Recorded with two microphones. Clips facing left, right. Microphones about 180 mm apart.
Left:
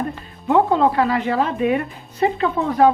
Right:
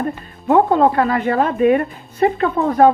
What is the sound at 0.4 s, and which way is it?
A woman's voice, 50° right (ahead or behind).